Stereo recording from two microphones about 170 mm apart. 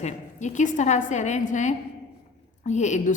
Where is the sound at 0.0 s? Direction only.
45° left (ahead or behind).